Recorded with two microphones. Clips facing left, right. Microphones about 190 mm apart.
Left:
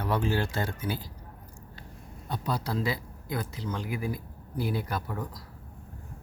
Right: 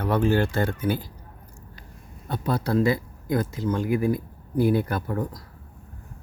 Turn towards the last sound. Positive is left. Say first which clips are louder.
# right 6 dB
turn(degrees=-50)  # may be behind; listen again after turning